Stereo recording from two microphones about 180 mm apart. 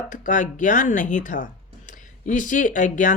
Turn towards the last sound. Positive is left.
turn(degrees=45)  # may be behind; listen again after turning